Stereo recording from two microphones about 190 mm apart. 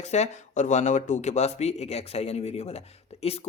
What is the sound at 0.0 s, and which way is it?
Speech, 35° left (ahead or behind).